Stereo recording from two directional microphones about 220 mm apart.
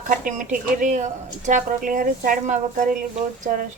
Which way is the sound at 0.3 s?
35° right (ahead or behind).